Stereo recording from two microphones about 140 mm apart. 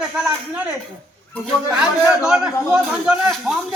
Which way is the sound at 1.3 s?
5° left (ahead or behind).